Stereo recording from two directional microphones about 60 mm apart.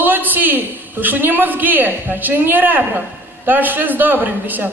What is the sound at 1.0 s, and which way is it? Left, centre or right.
A man's voice, right.